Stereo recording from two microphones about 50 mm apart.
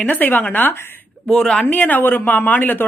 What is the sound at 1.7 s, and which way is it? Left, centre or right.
A woman's voice, left.